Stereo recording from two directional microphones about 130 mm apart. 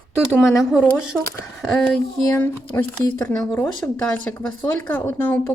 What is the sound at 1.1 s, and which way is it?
Speech, 5° left (ahead or behind).